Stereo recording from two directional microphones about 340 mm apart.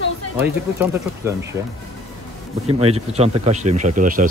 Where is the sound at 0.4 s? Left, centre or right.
Centre.